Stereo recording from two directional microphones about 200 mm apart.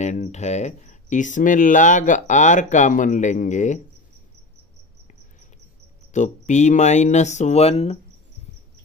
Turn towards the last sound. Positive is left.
turn(degrees=30)  # may be behind; listen again after turning